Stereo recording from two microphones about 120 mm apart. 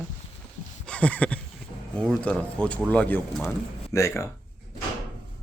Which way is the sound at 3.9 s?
25° left (ahead or behind).